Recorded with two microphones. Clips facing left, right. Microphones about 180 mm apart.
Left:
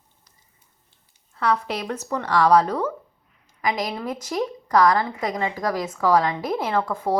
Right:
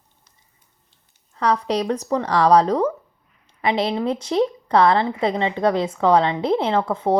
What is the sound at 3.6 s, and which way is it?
A woman's voice, 30° right (ahead or behind).